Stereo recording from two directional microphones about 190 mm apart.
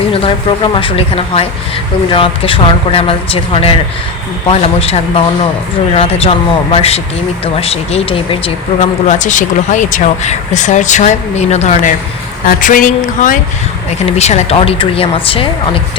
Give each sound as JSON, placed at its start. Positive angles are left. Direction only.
{"t": 0.1, "sound": "a woman's voice", "side_deg": 30}